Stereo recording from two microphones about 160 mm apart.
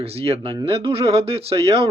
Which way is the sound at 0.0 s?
40° right (ahead or behind).